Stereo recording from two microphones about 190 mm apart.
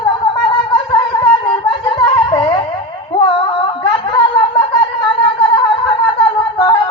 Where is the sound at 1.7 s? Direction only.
25° left (ahead or behind).